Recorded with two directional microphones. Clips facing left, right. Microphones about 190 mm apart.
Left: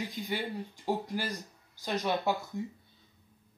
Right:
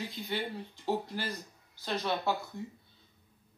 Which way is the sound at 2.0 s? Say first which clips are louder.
Left 2 dB; 15° left (ahead or behind).